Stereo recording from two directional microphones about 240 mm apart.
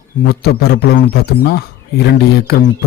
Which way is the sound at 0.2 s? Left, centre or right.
Left.